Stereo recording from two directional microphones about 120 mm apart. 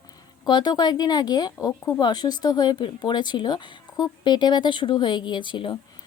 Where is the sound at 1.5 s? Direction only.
25° left (ahead or behind).